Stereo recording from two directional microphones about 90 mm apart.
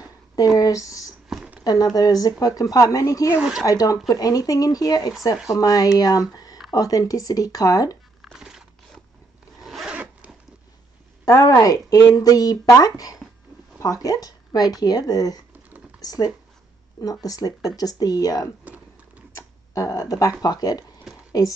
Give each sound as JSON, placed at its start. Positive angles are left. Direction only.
{"t": 0.6, "sound": "speech", "side_deg": 40}
{"t": 1.3, "sound": "a sound", "side_deg": -10}
{"t": 1.6, "sound": "speech", "side_deg": 50}
{"t": 3.3, "sound": "speech", "side_deg": -5}
{"t": 3.6, "sound": "speech", "side_deg": 40}
{"t": 8.2, "sound": "a sound", "side_deg": -5}
{"t": 9.6, "sound": "zipper", "side_deg": 0}
{"t": 11.2, "sound": "speech", "side_deg": 40}
{"t": 18.6, "sound": "typing", "side_deg": -15}
{"t": 19.7, "sound": "speech", "side_deg": 40}